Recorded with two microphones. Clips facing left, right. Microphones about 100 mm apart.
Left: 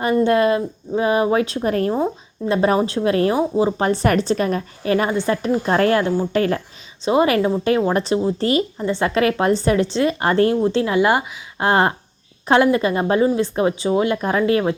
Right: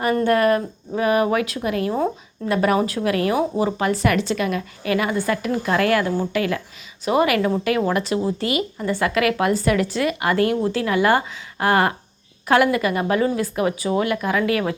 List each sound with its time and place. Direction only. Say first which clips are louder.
0.0 s a woman's voice: left 2 dB; 20° left (ahead or behind); by 1.9 s 40° left (ahead or behind)
2.5 s speech: left 2 dB; 30° left (ahead or behind)
7.0 s a woman's voice: left 2 dB; 25° left (ahead or behind)